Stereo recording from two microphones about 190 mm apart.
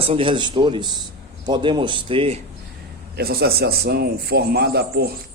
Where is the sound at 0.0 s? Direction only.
30° right (ahead or behind).